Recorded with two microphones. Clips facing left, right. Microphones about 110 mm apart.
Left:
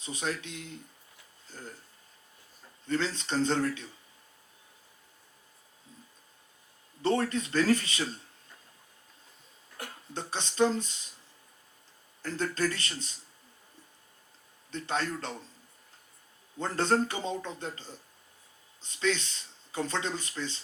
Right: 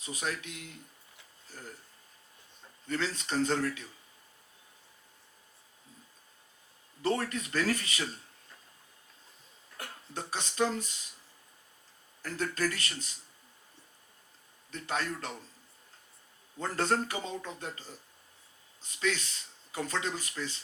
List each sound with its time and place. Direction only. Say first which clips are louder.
0.0 s speech: left 2 dB; 30° left (ahead or behind)
2.8 s speech: left 3 dB; 30° left (ahead or behind)
7.0 s speech: left 3 dB; 30° left (ahead or behind)
9.7 s speech: left 1 dB; 30° left (ahead or behind)
12.2 s speech: left 2 dB; 30° left (ahead or behind)
14.7 s a man's voice: left 2 dB; 30° left (ahead or behind)
16.6 s speech: left 3 dB; 30° left (ahead or behind)